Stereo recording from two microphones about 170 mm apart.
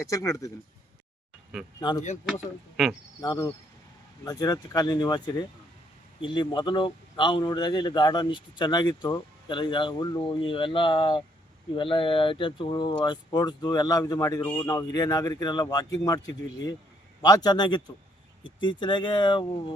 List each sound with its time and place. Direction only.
0.1 s a man's voice: 20° left (ahead or behind)
1.8 s a man's voice: 25° left (ahead or behind)
2.8 s speech: centre (ahead or behind)
3.2 s a man's voice: 20° left (ahead or behind)
14.7 s a man's voice: 25° left (ahead or behind)